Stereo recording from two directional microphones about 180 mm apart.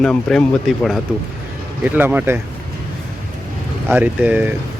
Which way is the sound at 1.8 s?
10° right (ahead or behind).